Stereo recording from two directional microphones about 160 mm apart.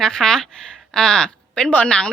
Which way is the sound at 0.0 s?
5° left (ahead or behind).